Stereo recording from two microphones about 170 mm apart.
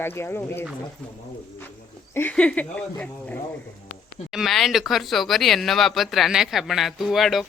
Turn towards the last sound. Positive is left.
turn(degrees=0)  # may be behind; listen again after turning